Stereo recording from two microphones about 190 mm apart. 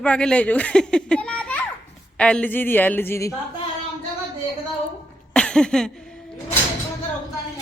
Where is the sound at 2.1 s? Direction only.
5° left (ahead or behind).